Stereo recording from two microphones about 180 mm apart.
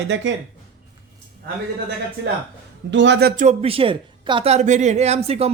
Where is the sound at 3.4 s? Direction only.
40° right (ahead or behind).